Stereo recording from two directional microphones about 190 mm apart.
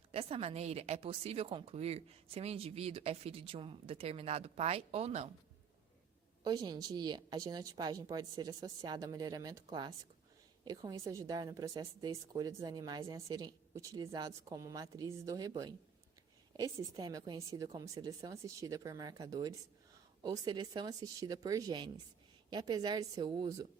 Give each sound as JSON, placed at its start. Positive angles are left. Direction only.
{"t": 0.1, "sound": "a woman's voice", "side_deg": -30}
{"t": 6.4, "sound": "a woman's voice", "side_deg": -20}